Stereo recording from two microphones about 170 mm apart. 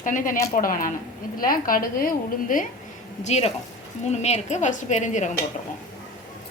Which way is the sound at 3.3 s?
40° left (ahead or behind).